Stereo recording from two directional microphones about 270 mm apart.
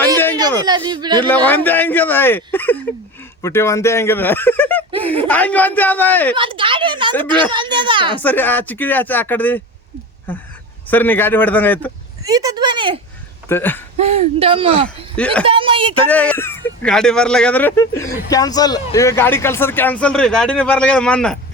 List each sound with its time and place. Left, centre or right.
0.6 s speech: centre
1.2 s speech: centre
4.9 s speech: centre
5.1 s speech: centre
6.3 s speech: centre
8.1 s speech: centre
12.2 s speech: centre
13.5 s speech: centre
14.0 s speech: right
14.8 s speech: centre
15.4 s speech: centre
16.0 s speech: centre